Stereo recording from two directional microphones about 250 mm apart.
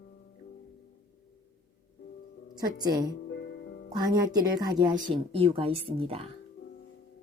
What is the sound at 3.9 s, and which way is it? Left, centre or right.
Speech, centre.